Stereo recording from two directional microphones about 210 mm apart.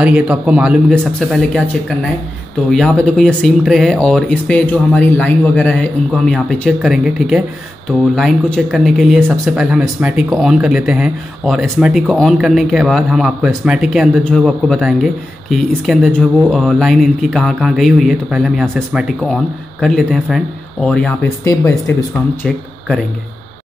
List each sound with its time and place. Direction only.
0.0 s speech: 5° right (ahead or behind); by 21.9 s 15° left (ahead or behind)